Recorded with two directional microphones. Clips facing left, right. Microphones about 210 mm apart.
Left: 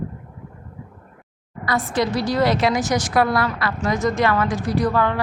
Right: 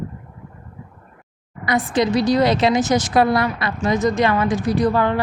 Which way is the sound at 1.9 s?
20° right (ahead or behind).